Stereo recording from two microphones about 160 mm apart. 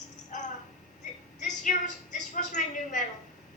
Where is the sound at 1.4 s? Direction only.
50° left (ahead or behind).